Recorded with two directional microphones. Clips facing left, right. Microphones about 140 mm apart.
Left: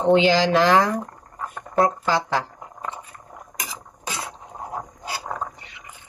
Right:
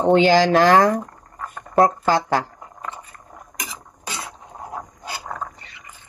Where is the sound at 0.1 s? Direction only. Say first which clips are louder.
Right 2 dB; 50° right (ahead or behind).